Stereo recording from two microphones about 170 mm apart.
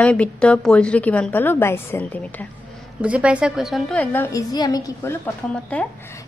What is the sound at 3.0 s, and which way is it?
A woman's voice, 5° right (ahead or behind).